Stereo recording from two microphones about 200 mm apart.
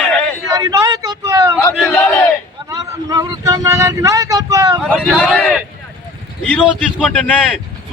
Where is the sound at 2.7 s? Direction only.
15° right (ahead or behind).